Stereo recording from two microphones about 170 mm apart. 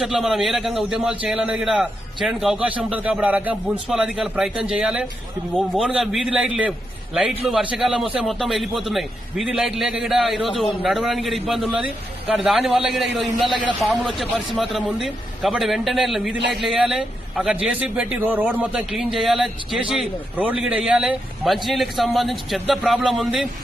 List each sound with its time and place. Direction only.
0.0 s a man's voice: centre (ahead or behind)